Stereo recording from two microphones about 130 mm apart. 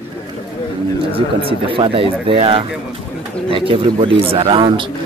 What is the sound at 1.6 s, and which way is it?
Speech, 45° right (ahead or behind).